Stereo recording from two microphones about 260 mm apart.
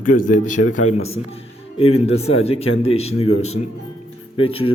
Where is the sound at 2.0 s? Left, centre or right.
Left.